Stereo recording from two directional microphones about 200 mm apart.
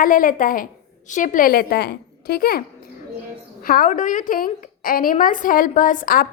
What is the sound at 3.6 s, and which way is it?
A woman's voice, 45° left (ahead or behind).